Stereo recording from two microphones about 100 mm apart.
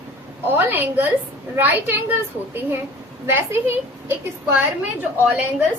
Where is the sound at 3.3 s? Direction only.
25° right (ahead or behind).